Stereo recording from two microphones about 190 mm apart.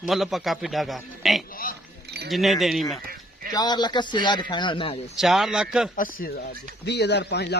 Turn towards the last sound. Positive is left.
turn(degrees=60)  # may be behind; listen again after turning